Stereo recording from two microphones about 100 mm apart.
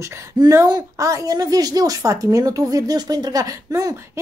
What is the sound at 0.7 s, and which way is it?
A woman's voice, 35° right (ahead or behind).